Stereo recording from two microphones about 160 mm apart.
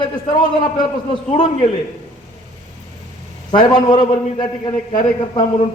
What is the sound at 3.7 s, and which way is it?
A man's voice, 30° left (ahead or behind).